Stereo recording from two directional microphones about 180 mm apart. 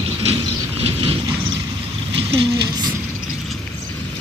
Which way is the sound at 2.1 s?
30° right (ahead or behind).